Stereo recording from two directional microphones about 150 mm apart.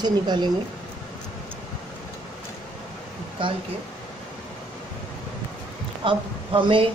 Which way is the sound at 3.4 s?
35° right (ahead or behind).